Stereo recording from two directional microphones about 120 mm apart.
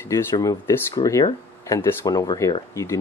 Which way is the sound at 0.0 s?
25° left (ahead or behind).